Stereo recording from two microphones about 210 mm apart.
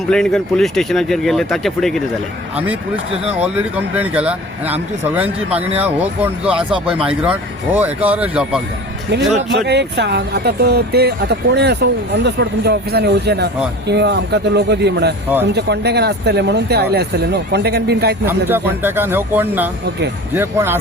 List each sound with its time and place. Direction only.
0.1 s a man's voice: centre (ahead or behind)
9.6 s speech: 55° right (ahead or behind)
18.3 s a man's voice: 10° right (ahead or behind)